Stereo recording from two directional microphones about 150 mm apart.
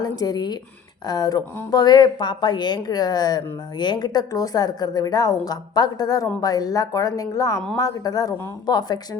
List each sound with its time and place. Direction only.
0.0 s a woman's voice: 25° left (ahead or behind)